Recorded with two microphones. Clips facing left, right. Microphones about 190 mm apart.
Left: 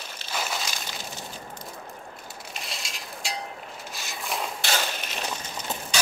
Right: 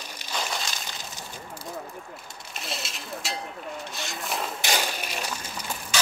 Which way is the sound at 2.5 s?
Centre (ahead or behind).